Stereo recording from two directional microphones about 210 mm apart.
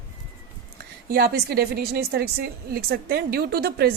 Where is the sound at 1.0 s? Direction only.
50° right (ahead or behind).